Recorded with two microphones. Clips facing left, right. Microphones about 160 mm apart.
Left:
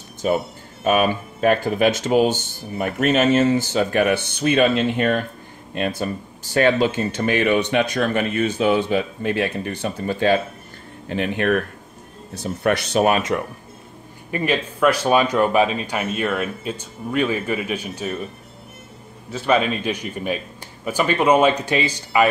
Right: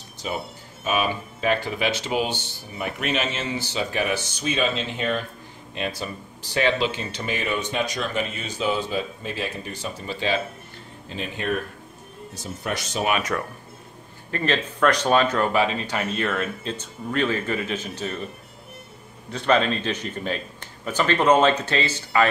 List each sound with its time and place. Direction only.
0.2 s speech: 50° left (ahead or behind)
11.1 s speech: 65° left (ahead or behind)
13.3 s speech: 20° left (ahead or behind)
14.3 s speech: 10° left (ahead or behind)
19.3 s speech: 10° left (ahead or behind)